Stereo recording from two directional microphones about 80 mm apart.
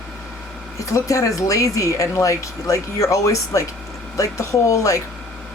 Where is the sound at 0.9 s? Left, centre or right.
Left.